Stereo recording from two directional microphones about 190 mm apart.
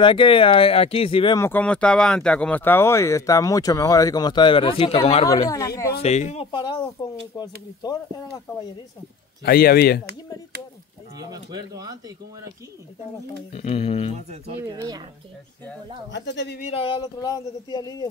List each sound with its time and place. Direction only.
0.0 s speech: 25° left (ahead or behind)
1.4 s speech: 10° left (ahead or behind); by 5.2 s 30° left (ahead or behind)
5.2 s speech: 20° left (ahead or behind)
6.0 s speech: 35° left (ahead or behind)
6.5 s speech: 25° left (ahead or behind)
9.4 s a man's voice: 55° left (ahead or behind)
11.1 s speech: 20° right (ahead or behind)
13.5 s speech: 30° left (ahead or behind)
14.7 s speech: 20° right (ahead or behind)
16.1 s speech: 65° left (ahead or behind)
16.6 s speech: 30° left (ahead or behind)